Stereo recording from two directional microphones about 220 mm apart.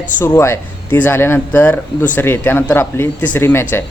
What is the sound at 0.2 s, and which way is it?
Speech, 10° left (ahead or behind).